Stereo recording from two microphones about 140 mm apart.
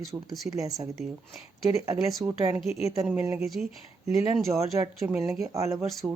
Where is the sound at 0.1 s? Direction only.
25° right (ahead or behind).